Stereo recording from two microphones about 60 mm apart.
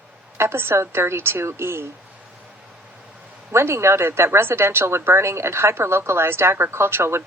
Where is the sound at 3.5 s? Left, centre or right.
Right.